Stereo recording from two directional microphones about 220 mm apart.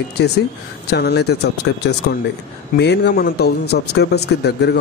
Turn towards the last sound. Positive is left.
turn(degrees=50)  # may be behind; listen again after turning